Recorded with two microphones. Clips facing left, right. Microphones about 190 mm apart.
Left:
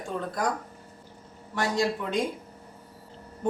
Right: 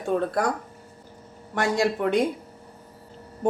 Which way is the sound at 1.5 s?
55° right (ahead or behind).